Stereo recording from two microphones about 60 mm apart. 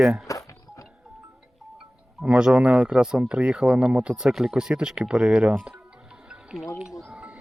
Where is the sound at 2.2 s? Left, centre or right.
Centre.